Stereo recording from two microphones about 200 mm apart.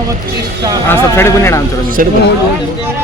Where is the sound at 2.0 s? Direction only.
45° right (ahead or behind).